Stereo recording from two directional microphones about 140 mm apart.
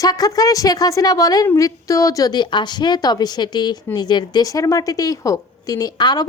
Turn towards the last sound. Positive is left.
turn(degrees=30)  # may be behind; listen again after turning